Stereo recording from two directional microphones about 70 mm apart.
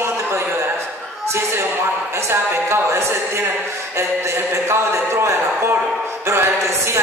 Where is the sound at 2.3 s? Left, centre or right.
Right.